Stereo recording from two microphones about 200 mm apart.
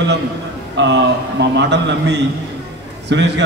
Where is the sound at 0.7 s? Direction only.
60° right (ahead or behind).